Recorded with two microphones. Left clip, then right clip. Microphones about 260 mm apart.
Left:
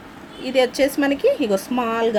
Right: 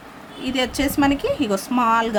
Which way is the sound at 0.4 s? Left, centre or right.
Right.